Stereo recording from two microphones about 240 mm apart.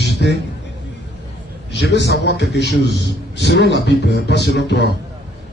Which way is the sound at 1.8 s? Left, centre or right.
Left.